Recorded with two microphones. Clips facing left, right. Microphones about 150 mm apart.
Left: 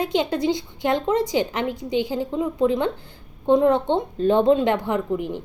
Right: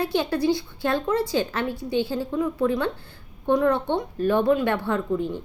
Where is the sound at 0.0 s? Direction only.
20° left (ahead or behind).